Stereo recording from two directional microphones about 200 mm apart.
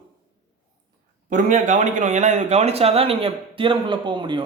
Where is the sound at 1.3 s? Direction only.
40° right (ahead or behind).